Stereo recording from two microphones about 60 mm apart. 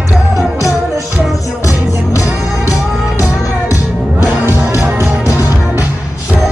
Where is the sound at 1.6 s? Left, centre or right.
Left.